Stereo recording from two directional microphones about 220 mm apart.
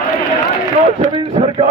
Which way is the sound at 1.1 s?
25° right (ahead or behind).